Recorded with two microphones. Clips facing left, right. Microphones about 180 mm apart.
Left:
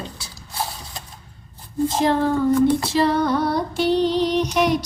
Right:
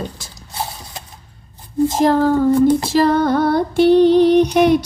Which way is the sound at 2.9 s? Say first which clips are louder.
Right 4 dB; 50° right (ahead or behind).